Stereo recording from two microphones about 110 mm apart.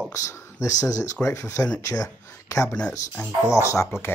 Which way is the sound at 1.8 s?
30° left (ahead or behind).